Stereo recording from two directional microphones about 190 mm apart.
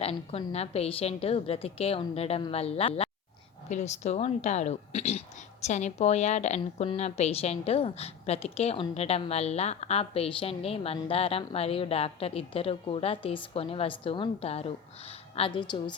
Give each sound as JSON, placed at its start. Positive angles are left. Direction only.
{"t": 0.0, "sound": "a woman's voice", "side_deg": 30}